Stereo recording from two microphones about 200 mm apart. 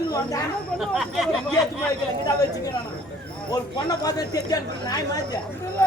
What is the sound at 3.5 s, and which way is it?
Speech, 20° left (ahead or behind).